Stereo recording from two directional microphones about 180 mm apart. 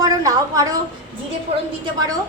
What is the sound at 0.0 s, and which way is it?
Speech, 20° right (ahead or behind).